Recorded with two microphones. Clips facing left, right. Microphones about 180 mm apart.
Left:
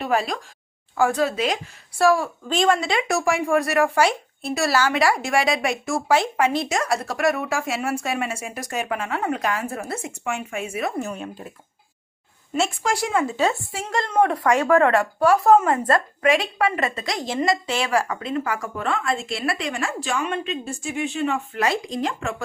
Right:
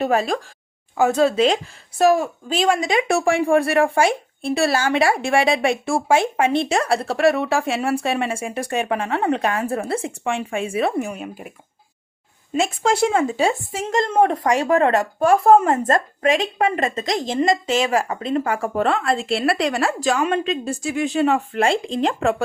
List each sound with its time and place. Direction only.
0.0 s speech: 45° right (ahead or behind)
0.9 s speech: 25° right (ahead or behind)
2.5 s speech: 10° right (ahead or behind)
3.1 s speech: 30° right (ahead or behind)
11.0 s speech: 10° right (ahead or behind)
12.8 s speech: 25° right (ahead or behind)
13.3 s speech: 15° right (ahead or behind)
15.2 s speech: 50° right (ahead or behind)
17.1 s a woman's voice: 20° right (ahead or behind)